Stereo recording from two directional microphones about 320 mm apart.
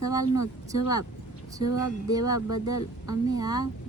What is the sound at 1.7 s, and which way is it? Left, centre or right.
Speech, left.